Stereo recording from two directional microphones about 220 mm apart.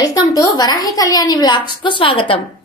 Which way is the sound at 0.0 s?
15° left (ahead or behind).